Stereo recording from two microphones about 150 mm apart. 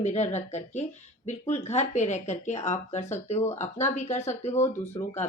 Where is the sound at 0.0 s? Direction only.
50° left (ahead or behind).